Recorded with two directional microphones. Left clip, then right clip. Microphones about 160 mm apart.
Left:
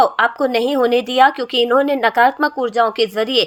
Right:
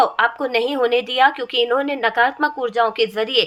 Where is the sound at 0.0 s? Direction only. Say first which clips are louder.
Left 3 dB; 35° left (ahead or behind).